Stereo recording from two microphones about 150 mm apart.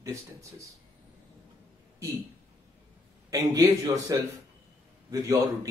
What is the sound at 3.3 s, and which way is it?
Speech, 25° right (ahead or behind).